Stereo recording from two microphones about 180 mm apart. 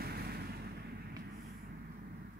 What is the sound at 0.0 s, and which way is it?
Artillery fire, 60° right (ahead or behind).